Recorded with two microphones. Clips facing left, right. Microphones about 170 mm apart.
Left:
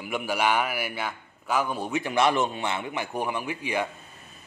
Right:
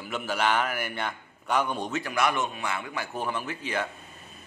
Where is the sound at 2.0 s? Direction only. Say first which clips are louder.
Left 5 dB; 25° left (ahead or behind).